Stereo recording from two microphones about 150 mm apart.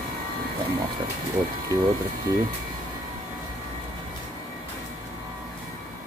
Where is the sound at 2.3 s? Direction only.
25° right (ahead or behind).